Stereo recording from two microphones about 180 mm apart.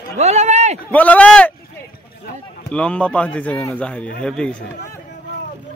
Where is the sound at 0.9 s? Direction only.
10° left (ahead or behind).